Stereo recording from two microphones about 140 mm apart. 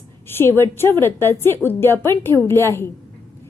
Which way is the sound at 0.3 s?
15° left (ahead or behind).